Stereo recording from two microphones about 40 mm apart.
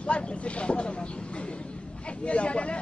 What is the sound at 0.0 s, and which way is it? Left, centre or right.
Speech, left.